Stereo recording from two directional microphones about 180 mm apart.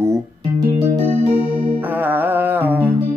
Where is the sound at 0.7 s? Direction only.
15° right (ahead or behind).